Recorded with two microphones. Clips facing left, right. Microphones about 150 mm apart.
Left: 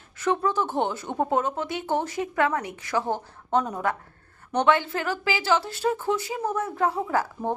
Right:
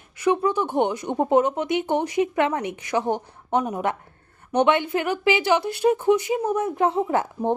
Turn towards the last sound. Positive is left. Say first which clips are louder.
# right 3 dB
turn(degrees=-20)  # may be behind; listen again after turning